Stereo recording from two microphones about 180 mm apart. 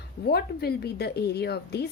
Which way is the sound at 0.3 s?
60° left (ahead or behind).